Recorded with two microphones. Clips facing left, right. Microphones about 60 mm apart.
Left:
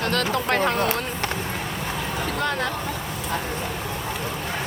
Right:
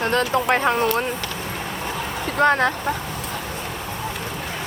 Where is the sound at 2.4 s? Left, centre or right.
Right.